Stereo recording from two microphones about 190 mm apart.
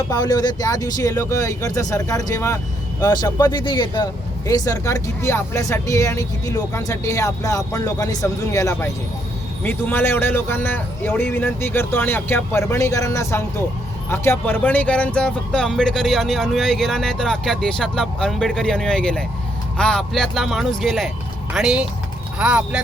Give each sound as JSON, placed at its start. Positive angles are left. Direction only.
{"t": 0.1, "sound": "a man's voice", "side_deg": 20}